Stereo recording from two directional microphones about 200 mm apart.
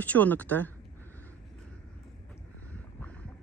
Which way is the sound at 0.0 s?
10° left (ahead or behind).